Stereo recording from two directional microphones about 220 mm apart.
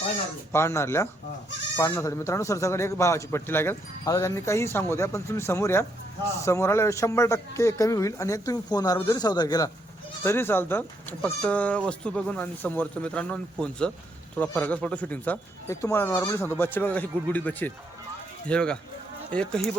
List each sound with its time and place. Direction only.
0.5 s speech: 10° left (ahead or behind)